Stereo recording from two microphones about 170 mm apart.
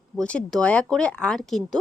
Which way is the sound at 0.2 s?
5° left (ahead or behind).